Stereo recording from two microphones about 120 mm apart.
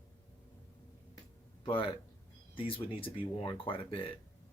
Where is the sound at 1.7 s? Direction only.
45° left (ahead or behind).